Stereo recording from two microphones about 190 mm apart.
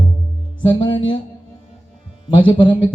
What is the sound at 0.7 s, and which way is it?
Speech, 25° left (ahead or behind).